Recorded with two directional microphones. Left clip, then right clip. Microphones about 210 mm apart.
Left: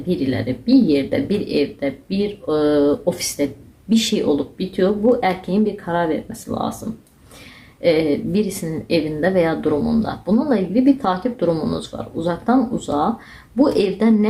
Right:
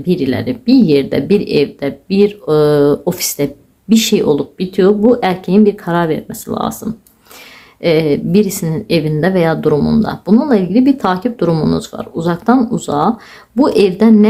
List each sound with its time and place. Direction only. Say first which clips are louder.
0.1 s speech: right 6 dB; 40° right (ahead or behind)
7.8 s speech: right 4 dB; 40° right (ahead or behind)